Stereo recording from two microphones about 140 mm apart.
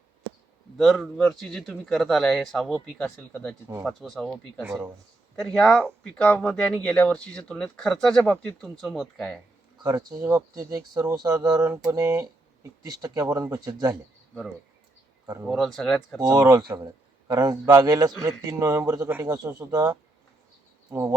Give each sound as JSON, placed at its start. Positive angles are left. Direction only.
{"t": 0.8, "sound": "speech", "side_deg": 0}
{"t": 4.6, "sound": "a sound", "side_deg": -15}
{"t": 5.4, "sound": "speech", "side_deg": 5}
{"t": 9.8, "sound": "a man's voice", "side_deg": -25}
{"t": 11.6, "sound": "a sound", "side_deg": -10}
{"t": 11.9, "sound": "a man's voice", "side_deg": -25}
{"t": 15.4, "sound": "speech", "side_deg": 0}
{"t": 16.2, "sound": "a man's voice", "side_deg": -25}
{"t": 19.0, "sound": "a sound", "side_deg": -15}
{"t": 19.3, "sound": "a man's voice", "side_deg": -30}